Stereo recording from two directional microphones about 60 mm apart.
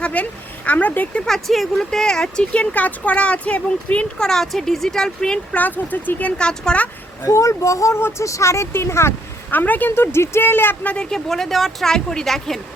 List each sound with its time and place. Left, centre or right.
0.0 s speech: left
1.2 s speech: centre; by 4.3 s left
4.3 s speech: centre
5.5 s speech: left
6.3 s speech: centre
7.3 s a child's voice: left
9.5 s speech: left
10.8 s speech: centre
11.3 s speech: centre